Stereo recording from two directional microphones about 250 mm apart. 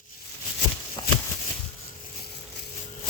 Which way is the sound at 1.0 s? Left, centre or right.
Centre.